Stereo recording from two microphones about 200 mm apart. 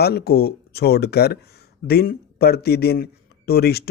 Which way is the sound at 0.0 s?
55° left (ahead or behind).